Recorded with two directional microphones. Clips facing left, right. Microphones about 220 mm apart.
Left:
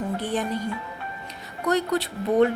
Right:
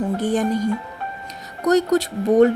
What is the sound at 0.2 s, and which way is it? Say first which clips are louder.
A woman's voice: right 7 dB; 45° right (ahead or behind).